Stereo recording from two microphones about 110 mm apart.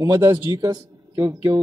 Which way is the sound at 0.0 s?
30° right (ahead or behind).